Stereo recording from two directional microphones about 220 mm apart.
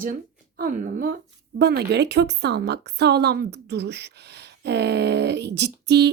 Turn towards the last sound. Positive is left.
turn(degrees=-50)  # may be behind; listen again after turning